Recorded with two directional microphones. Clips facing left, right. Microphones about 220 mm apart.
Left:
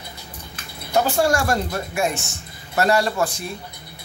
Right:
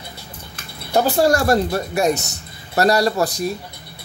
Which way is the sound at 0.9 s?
35° right (ahead or behind).